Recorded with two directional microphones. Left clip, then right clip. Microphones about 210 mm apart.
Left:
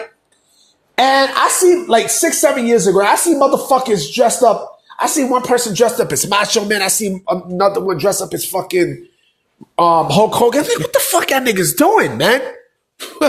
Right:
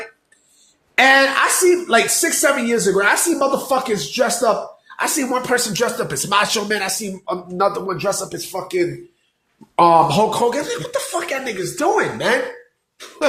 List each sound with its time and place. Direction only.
0.9 s a woman's voice: 15° left (ahead or behind)
6.0 s speech: 30° left (ahead or behind)
13.0 s cough: 40° left (ahead or behind)